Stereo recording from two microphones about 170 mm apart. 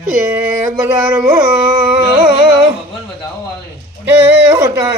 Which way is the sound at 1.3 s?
25° right (ahead or behind).